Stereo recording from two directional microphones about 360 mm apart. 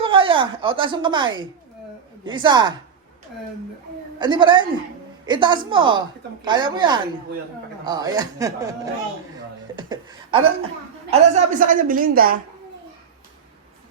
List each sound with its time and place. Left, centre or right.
0.0 s speech: centre
4.2 s a woman's voice: centre